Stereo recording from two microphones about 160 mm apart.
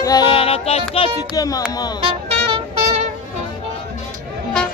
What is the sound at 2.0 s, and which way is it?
Music, 35° right (ahead or behind).